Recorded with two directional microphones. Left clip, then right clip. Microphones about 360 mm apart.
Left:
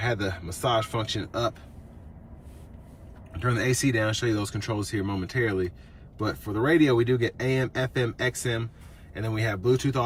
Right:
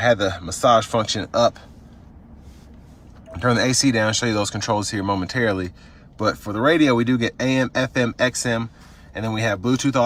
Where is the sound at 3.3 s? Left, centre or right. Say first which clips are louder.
Right 7 dB; centre.